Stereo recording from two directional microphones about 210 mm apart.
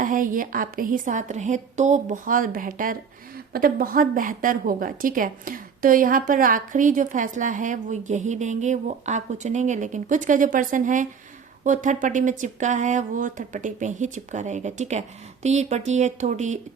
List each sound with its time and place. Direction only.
0.0 s a woman's voice: 40° right (ahead or behind)